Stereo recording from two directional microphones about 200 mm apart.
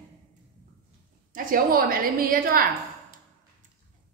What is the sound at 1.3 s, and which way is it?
A woman's voice, 45° right (ahead or behind).